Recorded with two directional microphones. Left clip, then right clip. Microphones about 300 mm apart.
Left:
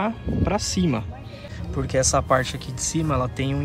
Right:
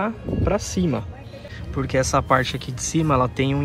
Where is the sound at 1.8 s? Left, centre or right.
Centre.